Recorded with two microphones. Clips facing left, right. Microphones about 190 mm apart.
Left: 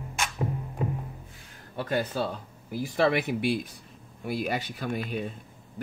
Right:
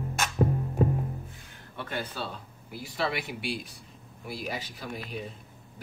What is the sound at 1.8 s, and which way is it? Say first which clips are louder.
Speech: left 7 dB; 40° left (ahead or behind).